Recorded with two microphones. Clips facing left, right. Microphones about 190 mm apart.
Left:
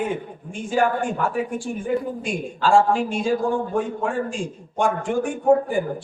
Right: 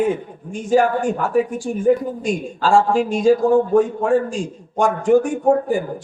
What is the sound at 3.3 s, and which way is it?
Speech, 40° right (ahead or behind).